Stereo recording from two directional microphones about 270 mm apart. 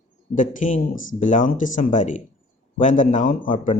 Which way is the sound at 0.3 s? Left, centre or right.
Left.